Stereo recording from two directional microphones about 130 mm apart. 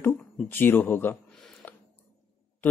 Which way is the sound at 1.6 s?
15° left (ahead or behind).